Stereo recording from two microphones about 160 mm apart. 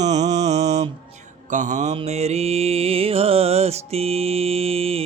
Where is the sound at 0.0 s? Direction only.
45° right (ahead or behind).